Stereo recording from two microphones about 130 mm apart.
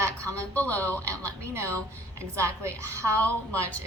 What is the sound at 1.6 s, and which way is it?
A woman's voice, 20° right (ahead or behind).